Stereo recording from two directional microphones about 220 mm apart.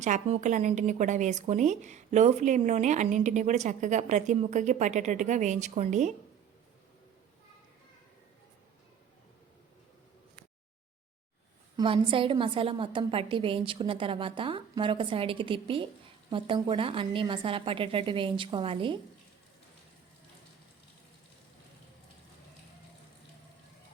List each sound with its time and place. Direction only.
0.0 s speech: 35° right (ahead or behind)
11.8 s a woman's voice: 25° right (ahead or behind)